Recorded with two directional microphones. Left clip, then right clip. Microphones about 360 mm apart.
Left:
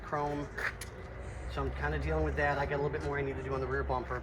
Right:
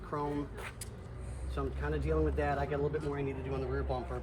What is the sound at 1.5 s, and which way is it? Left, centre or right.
A man's voice, left.